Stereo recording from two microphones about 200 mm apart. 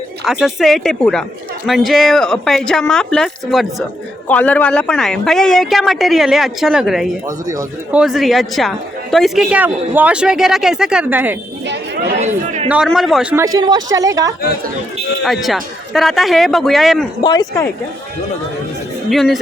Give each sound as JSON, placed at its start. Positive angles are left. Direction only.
{"t": 0.3, "sound": "speech", "side_deg": 0}
{"t": 7.3, "sound": "speech", "side_deg": -15}
{"t": 7.9, "sound": "speech", "side_deg": 0}
{"t": 11.6, "sound": "chatter", "side_deg": -60}
{"t": 12.6, "sound": "speech", "side_deg": -5}
{"t": 13.3, "sound": "speech", "side_deg": -20}
{"t": 15.2, "sound": "speech", "side_deg": 0}
{"t": 17.2, "sound": "speech", "side_deg": 15}
{"t": 19.1, "sound": "speech", "side_deg": 0}